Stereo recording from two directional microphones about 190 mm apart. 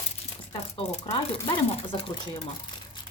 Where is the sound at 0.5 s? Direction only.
35° left (ahead or behind).